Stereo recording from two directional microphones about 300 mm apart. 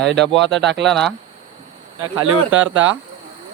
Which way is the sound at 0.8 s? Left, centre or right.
Centre.